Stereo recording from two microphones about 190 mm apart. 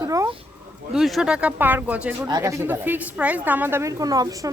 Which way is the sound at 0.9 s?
Centre (ahead or behind).